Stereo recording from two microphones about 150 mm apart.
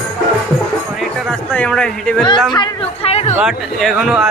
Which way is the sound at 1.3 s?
5° left (ahead or behind).